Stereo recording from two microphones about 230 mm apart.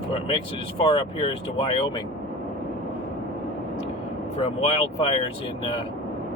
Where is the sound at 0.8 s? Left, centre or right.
Left.